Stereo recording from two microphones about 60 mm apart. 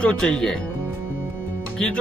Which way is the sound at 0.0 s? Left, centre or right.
Centre.